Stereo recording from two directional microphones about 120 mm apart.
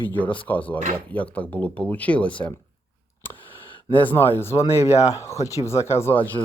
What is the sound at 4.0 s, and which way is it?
Speech, 15° left (ahead or behind).